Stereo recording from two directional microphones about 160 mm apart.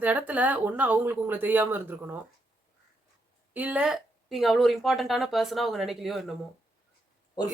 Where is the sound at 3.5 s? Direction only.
10° right (ahead or behind).